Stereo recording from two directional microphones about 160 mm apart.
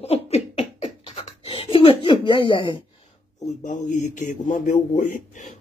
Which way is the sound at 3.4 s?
50° left (ahead or behind).